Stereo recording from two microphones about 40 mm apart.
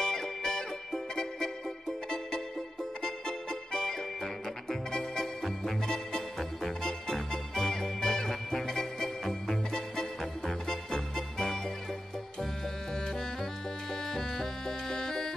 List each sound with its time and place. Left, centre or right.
0.0 s music: centre
12.9 s music: centre